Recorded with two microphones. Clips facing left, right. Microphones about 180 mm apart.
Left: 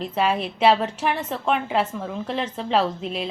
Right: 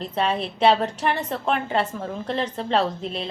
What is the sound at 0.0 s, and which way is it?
A woman's voice, 5° left (ahead or behind).